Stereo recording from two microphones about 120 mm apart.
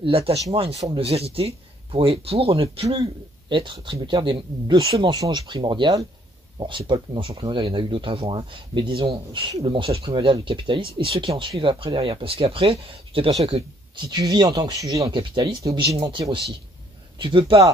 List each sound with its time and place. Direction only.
0.0 s speech: 50° right (ahead or behind)
2.9 s speech: 40° right (ahead or behind)
5.1 s speech: 30° right (ahead or behind); by 13.7 s 60° right (ahead or behind)
13.9 s speech: 35° right (ahead or behind)
15.0 s speech: 40° right (ahead or behind)